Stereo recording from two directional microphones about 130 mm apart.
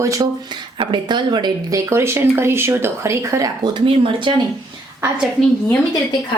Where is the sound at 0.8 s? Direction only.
35° right (ahead or behind).